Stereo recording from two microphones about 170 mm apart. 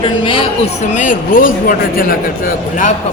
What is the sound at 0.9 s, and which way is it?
Speech, 50° left (ahead or behind).